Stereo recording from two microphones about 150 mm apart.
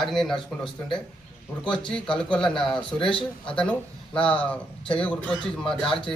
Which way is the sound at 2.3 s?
5° left (ahead or behind).